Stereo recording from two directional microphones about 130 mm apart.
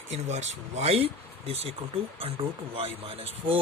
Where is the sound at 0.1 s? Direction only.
60° right (ahead or behind).